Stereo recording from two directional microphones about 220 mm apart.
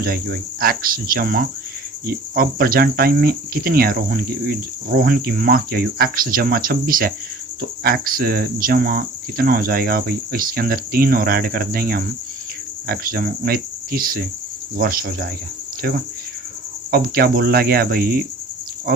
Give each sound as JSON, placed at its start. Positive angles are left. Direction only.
{"t": 0.0, "sound": "cricket", "side_deg": -40}
{"t": 16.9, "sound": "cricket", "side_deg": -45}